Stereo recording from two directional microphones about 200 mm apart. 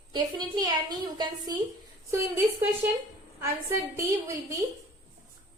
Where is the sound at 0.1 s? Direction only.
20° right (ahead or behind).